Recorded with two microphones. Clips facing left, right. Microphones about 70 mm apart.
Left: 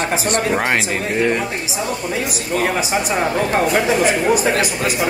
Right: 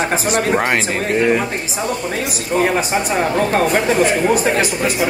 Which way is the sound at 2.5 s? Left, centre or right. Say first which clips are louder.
Right 3 dB; right.